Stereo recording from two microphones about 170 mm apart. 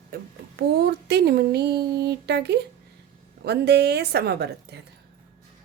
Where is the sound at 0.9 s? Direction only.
75° right (ahead or behind).